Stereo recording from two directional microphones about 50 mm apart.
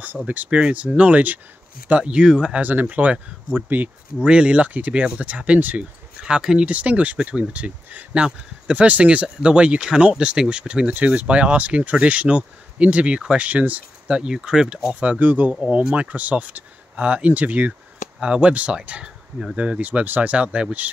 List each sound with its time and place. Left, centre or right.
0.5 s speech: right
2.6 s speech: right
4.2 s speech: right
6.2 s speech: centre
6.7 s speech: right
10.9 s speech: right
13.5 s speech: right; by 15.0 s centre
15.0 s speech: right
15.6 s speech: right
18.2 s speech: centre
18.5 s speech: right